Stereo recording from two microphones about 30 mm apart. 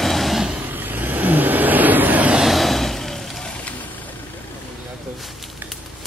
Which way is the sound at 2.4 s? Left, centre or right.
Centre.